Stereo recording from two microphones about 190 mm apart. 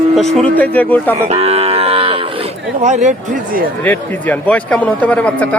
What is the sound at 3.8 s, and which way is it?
A man's voice, 10° left (ahead or behind).